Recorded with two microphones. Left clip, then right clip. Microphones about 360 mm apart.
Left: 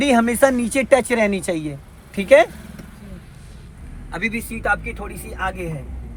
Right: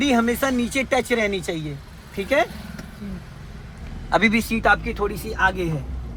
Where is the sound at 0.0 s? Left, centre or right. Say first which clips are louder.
Left 5 dB; centre.